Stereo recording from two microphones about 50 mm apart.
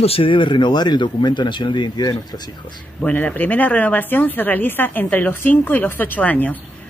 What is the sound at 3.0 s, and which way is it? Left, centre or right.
A woman's voice, left.